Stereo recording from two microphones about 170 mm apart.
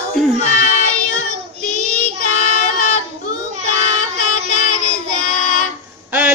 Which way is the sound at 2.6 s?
45° left (ahead or behind).